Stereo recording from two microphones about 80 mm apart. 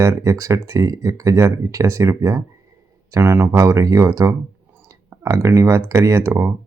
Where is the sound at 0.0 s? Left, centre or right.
Right.